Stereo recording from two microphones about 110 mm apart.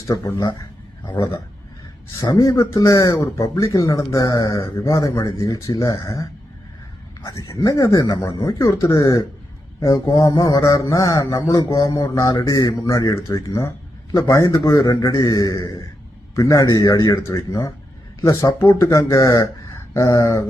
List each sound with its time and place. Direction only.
1.0 s a man's voice: 45° left (ahead or behind)
2.5 s speech: 30° left (ahead or behind)
7.5 s speech: 30° left (ahead or behind)
9.0 s a man's voice: 45° left (ahead or behind)
9.8 s speech: 30° left (ahead or behind)
16.3 s speech: 30° left (ahead or behind)